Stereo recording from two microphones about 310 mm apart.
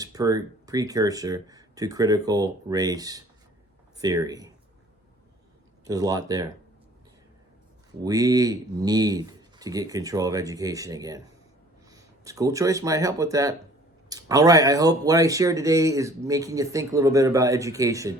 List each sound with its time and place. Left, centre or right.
0.0 s speech: centre
5.8 s speech: centre
8.0 s speech: centre